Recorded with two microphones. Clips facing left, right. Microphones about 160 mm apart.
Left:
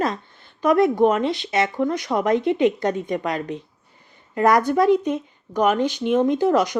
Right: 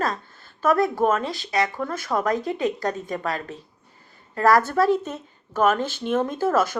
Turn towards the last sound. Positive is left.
turn(degrees=15)  # may be behind; listen again after turning